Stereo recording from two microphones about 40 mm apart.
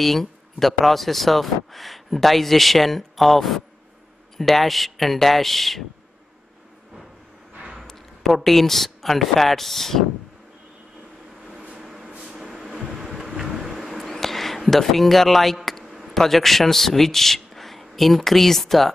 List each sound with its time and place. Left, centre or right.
0.0 s speech: centre
7.8 s a sound: centre
8.3 s speech: centre
11.7 s vehicle: centre
13.0 s vehicle: centre
14.0 s a sound: centre
16.2 s a man's voice: centre